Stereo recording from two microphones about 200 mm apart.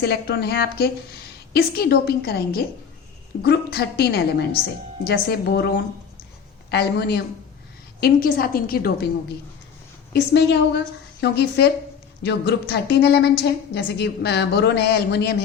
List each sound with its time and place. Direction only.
0.0 s a woman's voice: 55° left (ahead or behind)
10.1 s a woman's voice: 55° left (ahead or behind)